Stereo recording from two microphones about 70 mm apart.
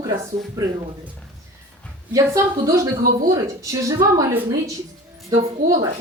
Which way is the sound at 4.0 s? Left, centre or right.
Right.